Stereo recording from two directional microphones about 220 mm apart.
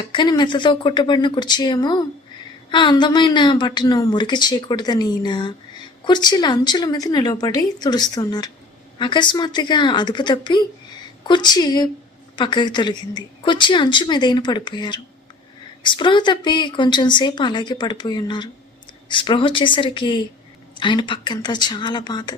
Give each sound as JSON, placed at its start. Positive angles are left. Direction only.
{"t": 0.1, "sound": "a woman's voice", "side_deg": 20}